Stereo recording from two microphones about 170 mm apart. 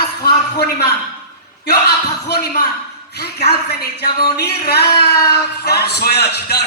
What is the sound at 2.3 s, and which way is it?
Speech, 70° left (ahead or behind).